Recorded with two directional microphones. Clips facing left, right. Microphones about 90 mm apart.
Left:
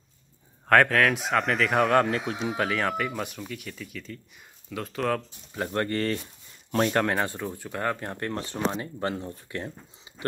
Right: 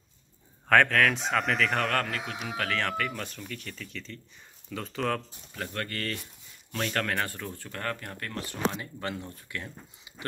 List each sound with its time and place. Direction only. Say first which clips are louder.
0.7 s speech: left 2 dB; 5° left (ahead or behind)
1.8 s speech: left 7 dB; 15° left (ahead or behind); by 5.2 s centre (ahead or behind)
5.5 s speech: left 8 dB; 30° left (ahead or behind)
8.0 s speech: left 6 dB; 30° left (ahead or behind)